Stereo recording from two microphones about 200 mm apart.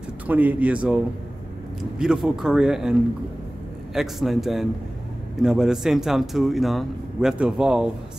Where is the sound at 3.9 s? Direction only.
Centre (ahead or behind).